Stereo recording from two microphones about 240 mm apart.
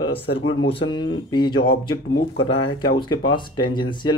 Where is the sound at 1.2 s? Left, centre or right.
Centre.